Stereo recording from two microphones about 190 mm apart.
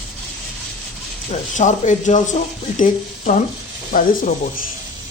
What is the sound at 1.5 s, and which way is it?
Speech, 40° left (ahead or behind).